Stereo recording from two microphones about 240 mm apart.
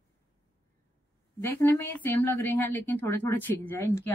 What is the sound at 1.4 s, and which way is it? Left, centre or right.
A woman's voice, centre.